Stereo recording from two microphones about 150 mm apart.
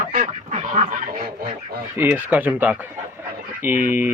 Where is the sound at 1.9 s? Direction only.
10° right (ahead or behind).